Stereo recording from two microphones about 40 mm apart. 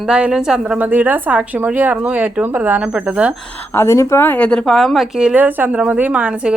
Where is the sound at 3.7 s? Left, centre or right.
Left.